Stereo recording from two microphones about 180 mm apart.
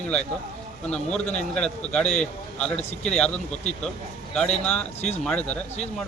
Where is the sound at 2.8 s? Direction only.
35° left (ahead or behind).